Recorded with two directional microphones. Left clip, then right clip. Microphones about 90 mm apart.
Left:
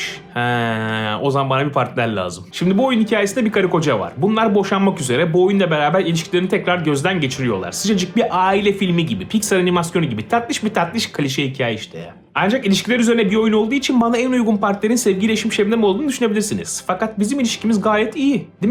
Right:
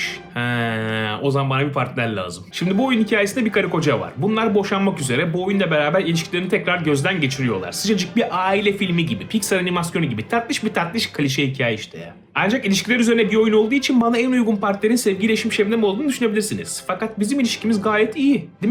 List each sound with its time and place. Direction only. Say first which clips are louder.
0.0 s speech: left 3 dB; 30° left (ahead or behind)